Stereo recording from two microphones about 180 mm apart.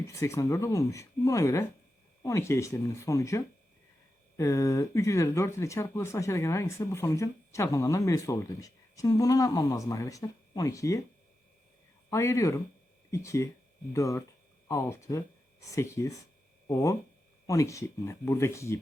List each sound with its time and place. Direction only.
0.1 s speech: 15° left (ahead or behind)
12.1 s speech: 15° left (ahead or behind)